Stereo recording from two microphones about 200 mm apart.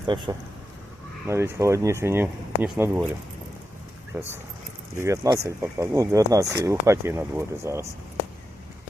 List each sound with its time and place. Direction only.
0.1 s speech: 20° right (ahead or behind)
1.3 s speech: 15° right (ahead or behind)
4.1 s speech: 10° right (ahead or behind)